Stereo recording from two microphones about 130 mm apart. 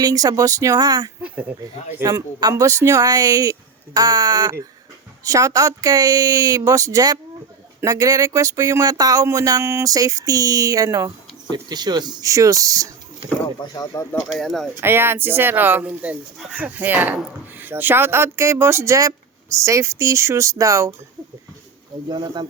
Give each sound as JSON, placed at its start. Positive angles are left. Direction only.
{"t": 0.0, "sound": "speech", "side_deg": -30}
{"t": 1.2, "sound": "speech", "side_deg": -10}
{"t": 2.0, "sound": "speech", "side_deg": -25}
{"t": 13.7, "sound": "speech", "side_deg": 25}
{"t": 14.3, "sound": "speech", "side_deg": 0}
{"t": 14.8, "sound": "speech", "side_deg": -15}
{"t": 22.1, "sound": "speech", "side_deg": -35}